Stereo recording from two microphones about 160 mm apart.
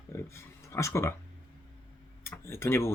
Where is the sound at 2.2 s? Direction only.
15° left (ahead or behind).